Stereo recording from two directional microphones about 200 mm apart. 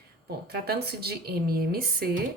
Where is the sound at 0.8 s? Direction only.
50° right (ahead or behind).